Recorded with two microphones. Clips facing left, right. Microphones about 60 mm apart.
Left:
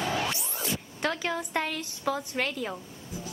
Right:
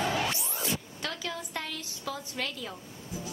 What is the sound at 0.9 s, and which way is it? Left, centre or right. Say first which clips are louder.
A woman's voice: left 6 dB; left.